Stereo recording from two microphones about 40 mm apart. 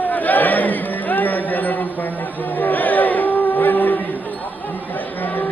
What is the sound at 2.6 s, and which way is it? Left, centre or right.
Music, left.